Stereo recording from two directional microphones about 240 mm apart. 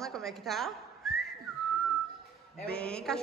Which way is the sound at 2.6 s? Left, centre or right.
Centre.